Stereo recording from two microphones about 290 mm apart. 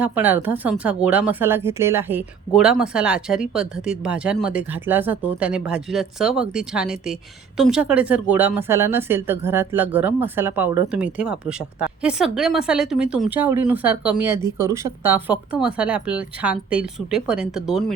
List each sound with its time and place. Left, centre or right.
0.0 s speech: centre